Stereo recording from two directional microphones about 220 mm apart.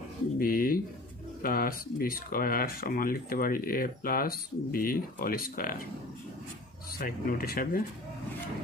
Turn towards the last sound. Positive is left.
turn(degrees=40)  # may be behind; listen again after turning